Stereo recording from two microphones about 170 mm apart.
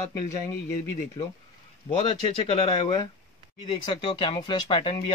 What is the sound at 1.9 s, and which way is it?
Speech, 35° left (ahead or behind).